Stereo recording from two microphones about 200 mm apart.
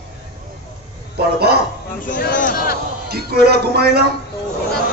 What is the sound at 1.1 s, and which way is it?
Speech, 55° right (ahead or behind).